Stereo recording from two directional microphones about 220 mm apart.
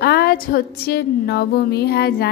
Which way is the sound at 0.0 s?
45° left (ahead or behind).